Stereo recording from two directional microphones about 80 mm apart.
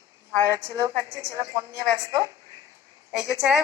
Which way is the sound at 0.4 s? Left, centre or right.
Right.